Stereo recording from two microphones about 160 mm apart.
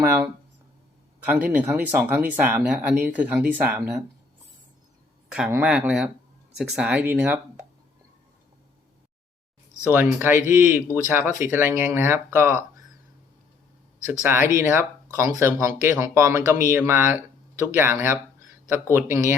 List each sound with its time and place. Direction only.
1.2 s speech: 10° right (ahead or behind)
5.6 s speech: 5° right (ahead or behind)
9.9 s speech: 10° right (ahead or behind)
14.1 s speech: 15° right (ahead or behind)